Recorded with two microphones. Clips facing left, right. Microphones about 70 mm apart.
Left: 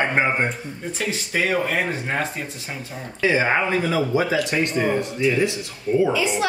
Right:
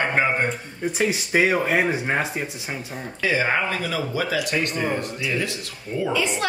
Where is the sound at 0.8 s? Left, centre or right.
Centre.